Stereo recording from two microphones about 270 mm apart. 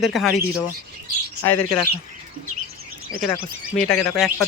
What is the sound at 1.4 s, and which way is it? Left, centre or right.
Speech, centre.